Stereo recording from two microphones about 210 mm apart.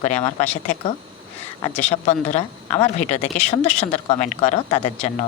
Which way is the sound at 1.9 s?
30° left (ahead or behind).